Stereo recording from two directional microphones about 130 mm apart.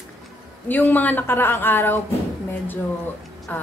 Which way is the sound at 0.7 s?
15° left (ahead or behind).